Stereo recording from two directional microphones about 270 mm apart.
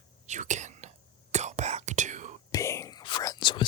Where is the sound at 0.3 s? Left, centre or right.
Right.